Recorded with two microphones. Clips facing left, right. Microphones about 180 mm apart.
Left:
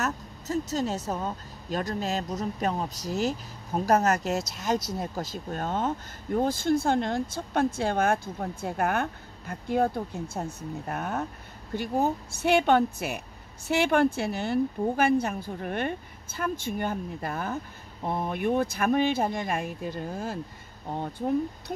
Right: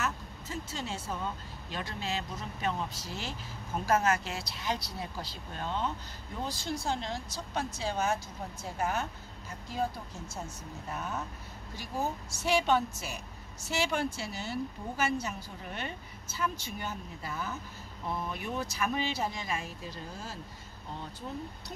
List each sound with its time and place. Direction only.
0.0 s speech: 40° left (ahead or behind)